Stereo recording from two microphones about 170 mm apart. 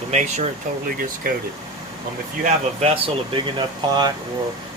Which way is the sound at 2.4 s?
35° right (ahead or behind).